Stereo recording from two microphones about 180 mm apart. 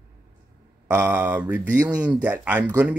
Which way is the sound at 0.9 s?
10° right (ahead or behind).